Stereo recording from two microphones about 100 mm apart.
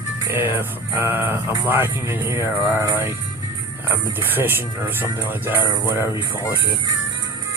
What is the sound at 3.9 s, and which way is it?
Speech, 20° right (ahead or behind).